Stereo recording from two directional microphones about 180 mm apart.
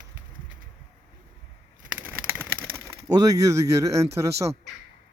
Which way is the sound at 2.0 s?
10° right (ahead or behind).